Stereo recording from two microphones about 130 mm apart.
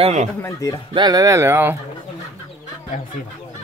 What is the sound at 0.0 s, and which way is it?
Speech, 60° right (ahead or behind).